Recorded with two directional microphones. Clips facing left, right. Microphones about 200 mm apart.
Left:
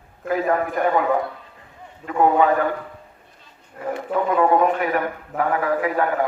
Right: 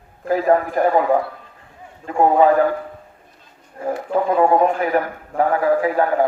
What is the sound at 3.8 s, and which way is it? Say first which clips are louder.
A man's voice: right 3 dB; 30° right (ahead or behind).